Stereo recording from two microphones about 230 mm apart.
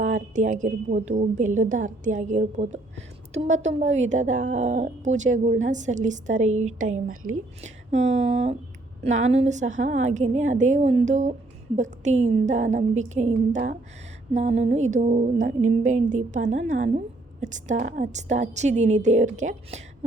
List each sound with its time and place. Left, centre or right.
0.0 s a woman's voice: right